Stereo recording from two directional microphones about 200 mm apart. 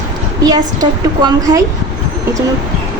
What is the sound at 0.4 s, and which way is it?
A woman's voice, 20° right (ahead or behind).